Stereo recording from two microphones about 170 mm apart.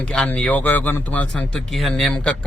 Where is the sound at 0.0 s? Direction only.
5° left (ahead or behind).